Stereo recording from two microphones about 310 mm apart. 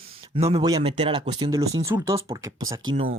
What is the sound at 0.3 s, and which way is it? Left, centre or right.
Speech, centre.